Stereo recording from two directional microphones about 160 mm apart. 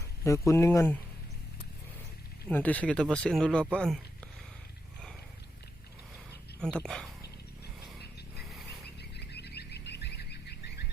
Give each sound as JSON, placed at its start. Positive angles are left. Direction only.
{"t": 0.3, "sound": "speech", "side_deg": 20}
{"t": 2.5, "sound": "speech", "side_deg": 10}
{"t": 6.6, "sound": "speech", "side_deg": 5}
{"t": 7.9, "sound": "vehicle", "side_deg": 0}
{"t": 9.0, "sound": "a sound", "side_deg": 90}